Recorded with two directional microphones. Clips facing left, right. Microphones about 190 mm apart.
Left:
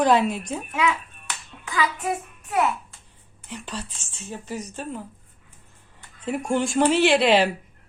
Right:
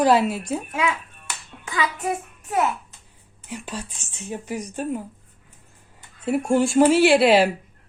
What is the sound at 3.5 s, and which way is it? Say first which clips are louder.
Speech: right 2 dB; 10° right (ahead or behind).